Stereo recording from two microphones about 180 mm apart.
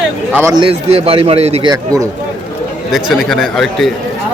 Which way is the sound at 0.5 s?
30° right (ahead or behind).